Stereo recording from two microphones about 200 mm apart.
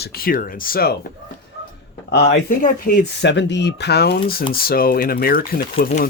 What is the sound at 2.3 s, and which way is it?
Speech, 40° left (ahead or behind).